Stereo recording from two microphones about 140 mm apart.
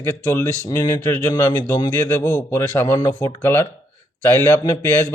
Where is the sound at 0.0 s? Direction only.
15° left (ahead or behind).